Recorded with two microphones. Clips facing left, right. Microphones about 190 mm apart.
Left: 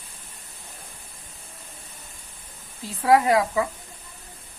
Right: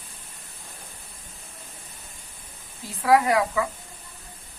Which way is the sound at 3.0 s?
30° left (ahead or behind).